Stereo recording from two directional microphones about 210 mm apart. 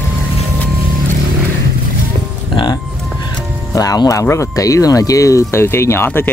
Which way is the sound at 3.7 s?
15° left (ahead or behind).